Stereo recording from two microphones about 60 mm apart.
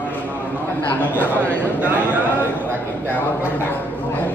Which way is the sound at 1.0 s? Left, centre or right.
Left.